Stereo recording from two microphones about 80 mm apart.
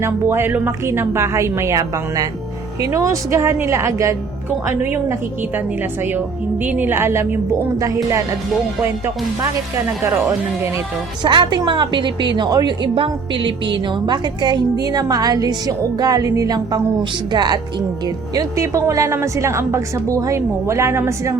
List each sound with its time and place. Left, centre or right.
0.0 s a woman's voice: right
4.6 s a woman's voice: right
6.7 s a woman's voice: right
7.8 s speech: right
10.0 s a woman's voice: right
11.2 s a woman's voice: right
17.0 s a woman's voice: right
18.3 s a woman's voice: right